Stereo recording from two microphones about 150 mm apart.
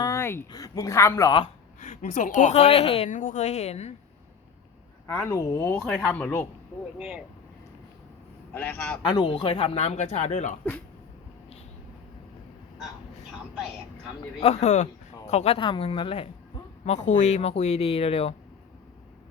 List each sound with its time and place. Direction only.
0.0 s speech: 20° left (ahead or behind)
1.8 s speech: 55° left (ahead or behind)
3.1 s speech: 60° left (ahead or behind)
5.0 s a woman's voice: 20° left (ahead or behind)
7.0 s speech: 5° right (ahead or behind)
8.5 s a woman's voice: 10° left (ahead or behind)
9.0 s speech: 25° left (ahead or behind)
9.3 s speech: 40° left (ahead or behind)
14.4 s speech: 50° left (ahead or behind)
16.8 s speech: 50° left (ahead or behind)